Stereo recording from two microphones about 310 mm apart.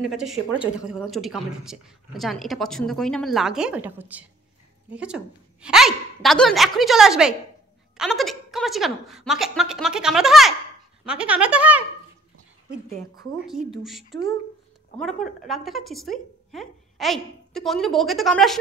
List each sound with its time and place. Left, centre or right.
0.0 s a woman's voice: centre
13.1 s a woman's voice: centre
13.5 s a woman's voice: centre